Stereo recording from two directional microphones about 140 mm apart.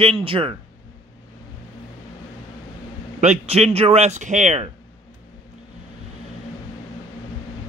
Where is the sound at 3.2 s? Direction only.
50° right (ahead or behind).